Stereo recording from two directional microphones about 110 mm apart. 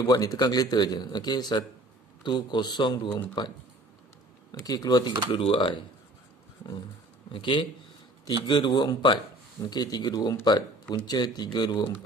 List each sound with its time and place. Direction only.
0.0 s speech: 35° left (ahead or behind); by 5.7 s 50° left (ahead or behind)
7.3 s speech: 50° left (ahead or behind)